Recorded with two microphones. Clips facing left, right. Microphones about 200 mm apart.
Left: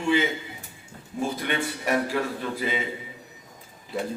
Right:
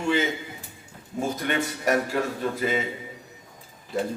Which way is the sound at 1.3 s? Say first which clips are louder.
Right 1 dB; 45° right (ahead or behind).